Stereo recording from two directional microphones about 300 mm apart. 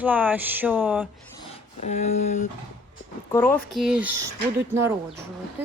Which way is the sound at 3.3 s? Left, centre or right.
Centre.